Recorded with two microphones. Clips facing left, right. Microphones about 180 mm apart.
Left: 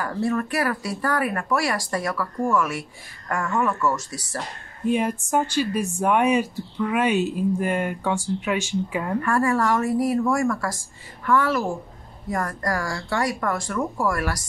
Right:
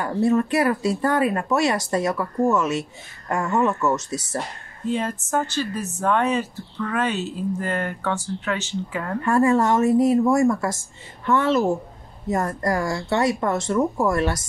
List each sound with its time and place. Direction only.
0.0 s speech: 20° right (ahead or behind)
4.8 s a woman's voice: 15° left (ahead or behind)
9.2 s speech: 20° right (ahead or behind)